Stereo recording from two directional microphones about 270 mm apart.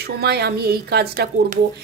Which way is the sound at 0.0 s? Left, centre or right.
Right.